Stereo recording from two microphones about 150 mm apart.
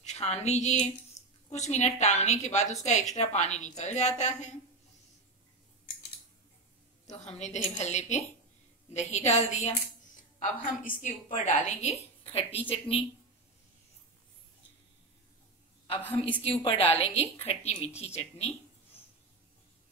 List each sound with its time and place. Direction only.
0.0 s a sound: 50° left (ahead or behind)
1.2 s a sound: 25° left (ahead or behind)
1.5 s a woman's voice: 50° left (ahead or behind)
7.1 s a woman's voice: 50° left (ahead or behind)
10.4 s a woman's voice: 60° left (ahead or behind); by 13.0 s 40° left (ahead or behind)
16.4 s a woman's voice: 40° left (ahead or behind)